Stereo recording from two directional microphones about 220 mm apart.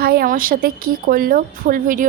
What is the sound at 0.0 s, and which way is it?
A woman's voice, 45° right (ahead or behind).